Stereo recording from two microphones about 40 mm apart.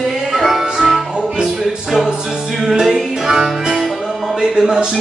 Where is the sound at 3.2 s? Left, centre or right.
Centre.